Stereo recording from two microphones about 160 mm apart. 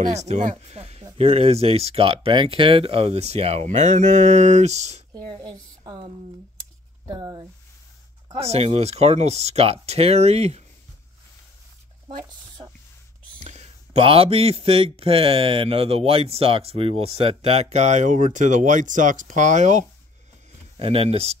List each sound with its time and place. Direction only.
0.1 s a man's voice: 45° right (ahead or behind)
5.3 s a woman's voice: 30° right (ahead or behind)
7.1 s speech: 25° right (ahead or behind)
8.4 s a man's voice: 40° right (ahead or behind)
13.4 s a man's voice: 45° right (ahead or behind)
20.8 s a man's voice: 35° right (ahead or behind)